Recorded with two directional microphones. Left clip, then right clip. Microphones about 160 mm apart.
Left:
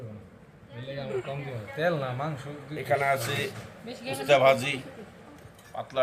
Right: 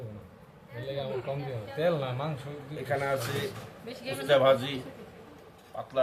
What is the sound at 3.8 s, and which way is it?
Speech, 5° left (ahead or behind).